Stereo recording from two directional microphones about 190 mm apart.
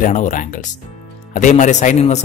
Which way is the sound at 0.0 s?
45° left (ahead or behind).